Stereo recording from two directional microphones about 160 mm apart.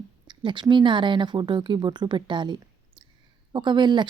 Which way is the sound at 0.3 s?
30° right (ahead or behind).